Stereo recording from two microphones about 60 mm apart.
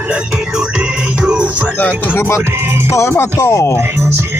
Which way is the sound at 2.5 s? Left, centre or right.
Right.